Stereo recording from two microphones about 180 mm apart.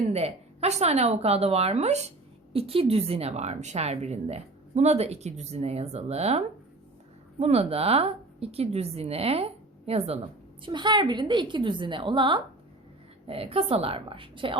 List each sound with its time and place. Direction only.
0.1 s a woman's voice: 35° right (ahead or behind)